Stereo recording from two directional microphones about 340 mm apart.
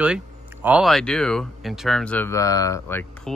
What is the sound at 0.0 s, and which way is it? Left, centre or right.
Speech, centre.